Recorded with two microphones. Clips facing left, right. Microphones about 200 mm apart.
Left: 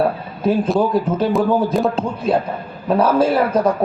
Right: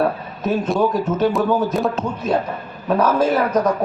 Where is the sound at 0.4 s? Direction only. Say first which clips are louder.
Left 2 dB; 30° left (ahead or behind).